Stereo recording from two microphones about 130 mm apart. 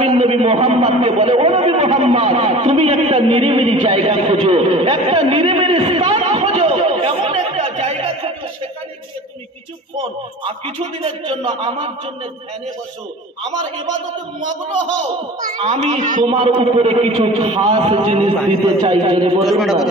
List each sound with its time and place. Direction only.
0.2 s a man's voice: 50° right (ahead or behind)
6.0 s chatter: 45° right (ahead or behind)
7.3 s a sound: 50° right (ahead or behind)
11.0 s a man's voice: 50° right (ahead or behind)
15.6 s a child's voice: 65° right (ahead or behind)
16.3 s a man's voice: 45° right (ahead or behind)
19.4 s a man's voice: centre (ahead or behind)